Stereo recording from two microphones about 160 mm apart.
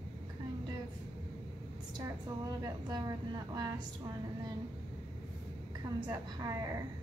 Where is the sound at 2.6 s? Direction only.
25° right (ahead or behind).